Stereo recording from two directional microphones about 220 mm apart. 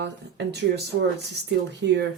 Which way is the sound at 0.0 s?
50° right (ahead or behind).